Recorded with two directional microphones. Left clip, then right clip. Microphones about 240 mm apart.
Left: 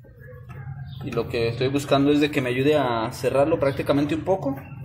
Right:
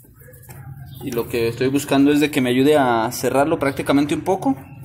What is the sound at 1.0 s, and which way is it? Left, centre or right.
A man's voice, right.